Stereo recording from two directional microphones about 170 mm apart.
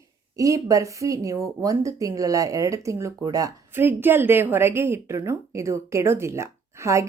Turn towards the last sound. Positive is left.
turn(degrees=-15)  # may be behind; listen again after turning